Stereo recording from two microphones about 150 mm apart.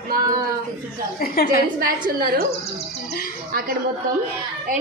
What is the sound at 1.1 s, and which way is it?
Speech, 85° left.